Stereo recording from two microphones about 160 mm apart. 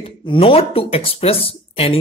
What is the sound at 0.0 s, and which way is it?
Speech, 35° left (ahead or behind).